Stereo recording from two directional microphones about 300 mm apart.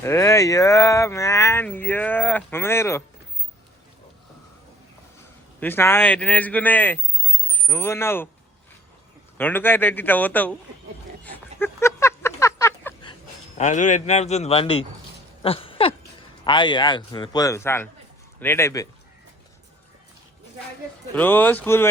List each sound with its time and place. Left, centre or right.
0.0 s speech: centre
5.5 s a man's voice: centre
9.4 s speech: centre
11.2 s a sound: centre
13.6 s speech: left
15.4 s a sound: centre
16.4 s speech: centre
21.2 s speech: centre